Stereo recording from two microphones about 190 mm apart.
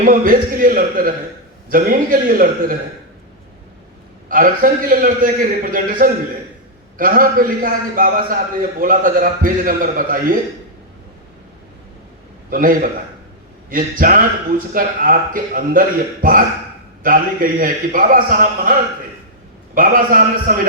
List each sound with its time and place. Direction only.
0.0 s a man's voice: 45° right (ahead or behind)
4.3 s a man's voice: 45° right (ahead or behind)
12.5 s a man's voice: 45° right (ahead or behind)
19.7 s a man's voice: 45° right (ahead or behind)